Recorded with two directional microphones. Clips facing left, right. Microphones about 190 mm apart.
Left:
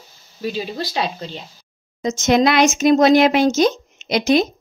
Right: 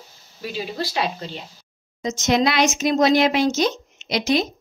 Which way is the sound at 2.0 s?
50° left (ahead or behind).